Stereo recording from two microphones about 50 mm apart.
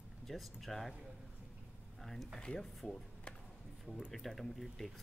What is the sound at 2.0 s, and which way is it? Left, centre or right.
Speech, centre.